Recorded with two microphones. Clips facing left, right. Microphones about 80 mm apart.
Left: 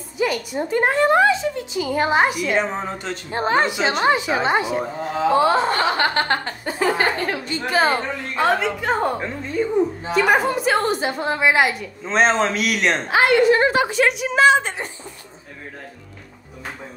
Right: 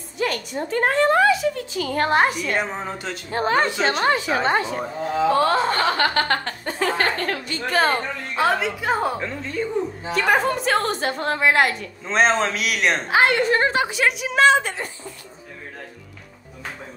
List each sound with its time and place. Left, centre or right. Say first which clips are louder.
0.2 s a woman's voice: left 3 dB; centre
3.3 s speech: left 1 dB; left
3.6 s a woman's voice: left 1 dB; centre
6.6 s a woman's voice: left 5 dB; centre
7.7 s a woman's voice: left 1 dB; centre
9.2 s a woman's voice: left 3 dB; centre
13.6 s speech: left 3 dB; left
14.0 s a woman's voice: even; centre
14.5 s speech: left 1 dB; left